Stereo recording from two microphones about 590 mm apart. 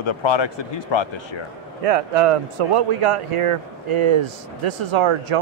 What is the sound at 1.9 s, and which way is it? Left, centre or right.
Speech, right.